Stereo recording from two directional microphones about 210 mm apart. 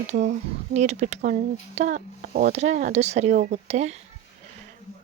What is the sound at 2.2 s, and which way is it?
Speech, 45° right (ahead or behind).